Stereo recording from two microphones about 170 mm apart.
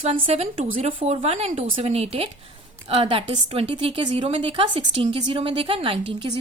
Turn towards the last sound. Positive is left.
turn(degrees=-30)  # may be behind; listen again after turning